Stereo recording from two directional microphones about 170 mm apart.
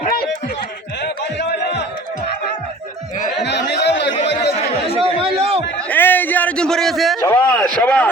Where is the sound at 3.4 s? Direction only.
90° left.